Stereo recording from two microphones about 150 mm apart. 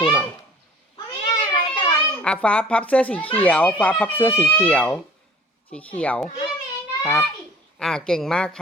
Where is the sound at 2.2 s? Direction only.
5° left (ahead or behind).